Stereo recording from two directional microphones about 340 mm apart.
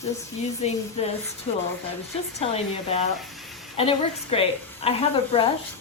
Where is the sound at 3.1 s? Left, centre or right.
Centre.